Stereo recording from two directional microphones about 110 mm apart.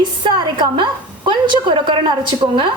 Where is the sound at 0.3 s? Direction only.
45° right (ahead or behind).